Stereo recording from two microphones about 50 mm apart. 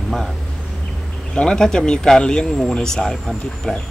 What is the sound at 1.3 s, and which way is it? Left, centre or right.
Speech, centre.